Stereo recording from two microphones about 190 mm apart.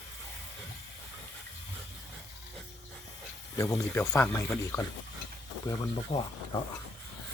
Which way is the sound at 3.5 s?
15° left (ahead or behind).